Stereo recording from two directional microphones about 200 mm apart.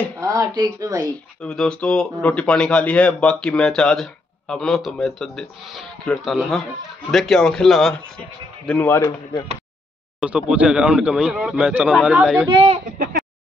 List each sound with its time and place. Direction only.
0.2 s speech: 20° right (ahead or behind)
0.9 s a man's voice: 5° left (ahead or behind)
10.2 s a man's voice: 5° right (ahead or behind)
12.4 s speech: 30° right (ahead or behind)